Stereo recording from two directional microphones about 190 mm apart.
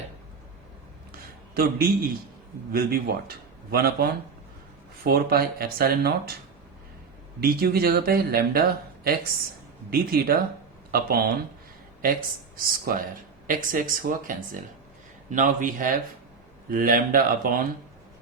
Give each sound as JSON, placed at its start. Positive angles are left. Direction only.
{"t": 1.5, "sound": "speech", "side_deg": -50}
{"t": 7.4, "sound": "speech", "side_deg": -50}
{"t": 12.5, "sound": "speech", "side_deg": -50}